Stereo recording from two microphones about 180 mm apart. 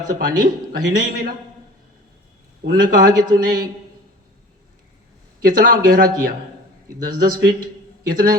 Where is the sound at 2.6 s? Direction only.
55° right (ahead or behind).